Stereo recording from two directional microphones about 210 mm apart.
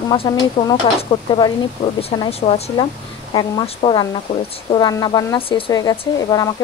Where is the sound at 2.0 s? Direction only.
30° left (ahead or behind).